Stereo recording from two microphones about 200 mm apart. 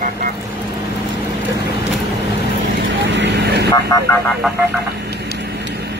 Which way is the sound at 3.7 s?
20° left (ahead or behind).